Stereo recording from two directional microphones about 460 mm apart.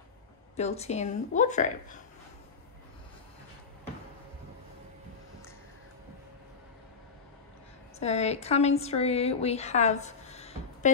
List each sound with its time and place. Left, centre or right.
0.6 s speech: centre
8.0 s a woman's voice: centre